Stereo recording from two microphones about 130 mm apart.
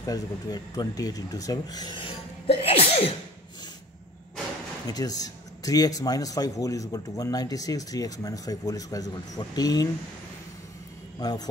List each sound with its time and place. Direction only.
0.0 s speech: 30° left (ahead or behind); by 3.1 s 50° left (ahead or behind)
4.8 s a man's voice: 30° left (ahead or behind)
11.1 s a man's voice: 30° left (ahead or behind)